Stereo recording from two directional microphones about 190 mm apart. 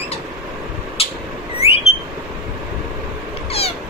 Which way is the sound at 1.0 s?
30° left (ahead or behind).